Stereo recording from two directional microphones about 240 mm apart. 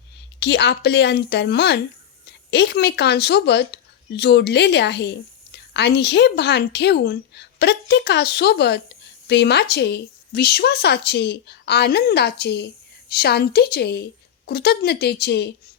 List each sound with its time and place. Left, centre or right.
0.3 s speech: left